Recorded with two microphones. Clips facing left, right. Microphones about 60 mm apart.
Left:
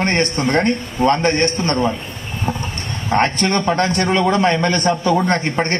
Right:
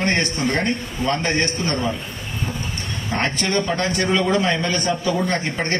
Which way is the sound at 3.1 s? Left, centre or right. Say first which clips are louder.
Left 5 dB; left.